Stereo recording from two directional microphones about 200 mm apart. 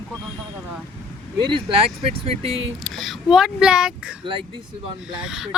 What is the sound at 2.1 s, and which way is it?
Speech, 30° right (ahead or behind).